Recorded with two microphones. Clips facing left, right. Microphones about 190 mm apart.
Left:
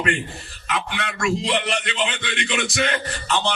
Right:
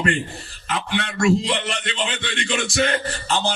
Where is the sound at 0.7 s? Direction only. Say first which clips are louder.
Right 2 dB; 35° right (ahead or behind).